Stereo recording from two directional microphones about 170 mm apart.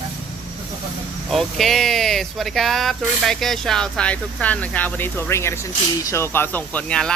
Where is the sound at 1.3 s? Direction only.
Centre (ahead or behind).